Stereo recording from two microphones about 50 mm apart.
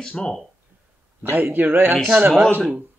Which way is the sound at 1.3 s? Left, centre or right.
Right.